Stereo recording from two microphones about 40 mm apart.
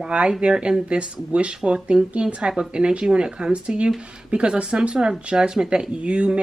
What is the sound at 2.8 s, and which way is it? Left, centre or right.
Speech, right.